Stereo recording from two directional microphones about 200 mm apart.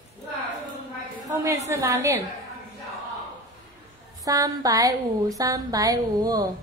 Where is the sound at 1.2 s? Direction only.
15° right (ahead or behind).